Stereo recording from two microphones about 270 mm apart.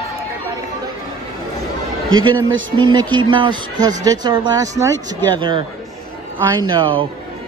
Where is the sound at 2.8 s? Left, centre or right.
Centre.